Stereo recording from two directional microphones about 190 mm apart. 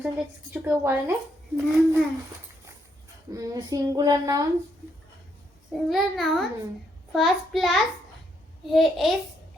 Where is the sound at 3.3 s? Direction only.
20° right (ahead or behind).